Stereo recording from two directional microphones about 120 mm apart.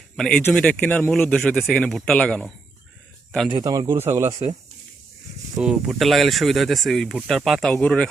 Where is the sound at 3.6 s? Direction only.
30° right (ahead or behind).